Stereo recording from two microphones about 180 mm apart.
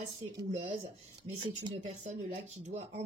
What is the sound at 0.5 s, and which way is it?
Speech, 35° right (ahead or behind).